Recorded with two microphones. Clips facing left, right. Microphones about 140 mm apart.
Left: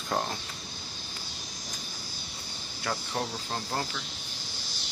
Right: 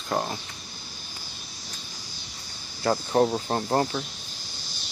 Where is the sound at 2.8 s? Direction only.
40° right (ahead or behind).